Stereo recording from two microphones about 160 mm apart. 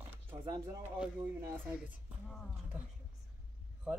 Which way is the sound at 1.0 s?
10° right (ahead or behind).